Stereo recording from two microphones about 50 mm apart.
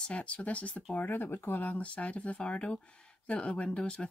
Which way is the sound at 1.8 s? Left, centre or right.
Left.